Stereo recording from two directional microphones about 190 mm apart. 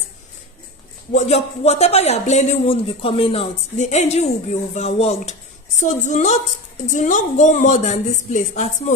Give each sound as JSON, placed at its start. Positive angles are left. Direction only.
{"t": 1.1, "sound": "a man's voice", "side_deg": 35}